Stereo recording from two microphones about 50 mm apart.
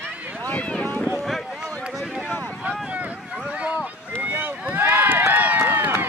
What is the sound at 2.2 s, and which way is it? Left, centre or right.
Vehicle, left.